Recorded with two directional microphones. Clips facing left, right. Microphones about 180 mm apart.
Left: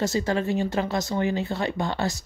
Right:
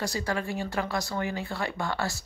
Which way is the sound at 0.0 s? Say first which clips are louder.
Left 6 dB; 25° left (ahead or behind).